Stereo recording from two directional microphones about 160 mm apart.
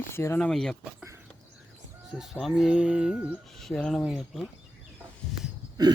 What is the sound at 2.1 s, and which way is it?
Speech, centre (ahead or behind).